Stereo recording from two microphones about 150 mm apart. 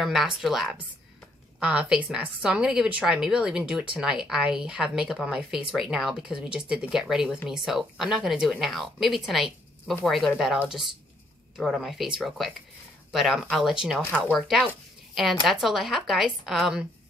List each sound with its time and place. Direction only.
0.0 s a woman's voice: centre (ahead or behind)